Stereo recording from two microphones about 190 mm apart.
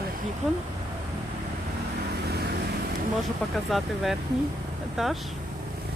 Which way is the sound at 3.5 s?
Centre (ahead or behind).